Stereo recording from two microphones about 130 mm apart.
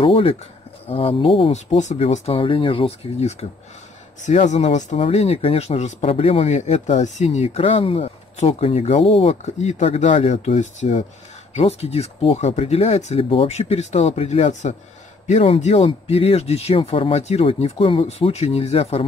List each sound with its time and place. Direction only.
0.0 s speech: 45° left (ahead or behind)
1.5 s speech: 60° left (ahead or behind)
4.2 s speech: 65° left (ahead or behind)
4.9 s speech: 50° left (ahead or behind)
11.5 s speech: 50° left (ahead or behind)
15.2 s speech: 50° left (ahead or behind)